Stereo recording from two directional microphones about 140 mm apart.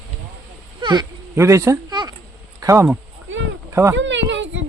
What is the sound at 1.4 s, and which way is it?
Speech, 20° right (ahead or behind).